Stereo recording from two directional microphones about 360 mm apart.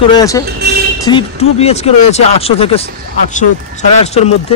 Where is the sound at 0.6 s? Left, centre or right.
Right.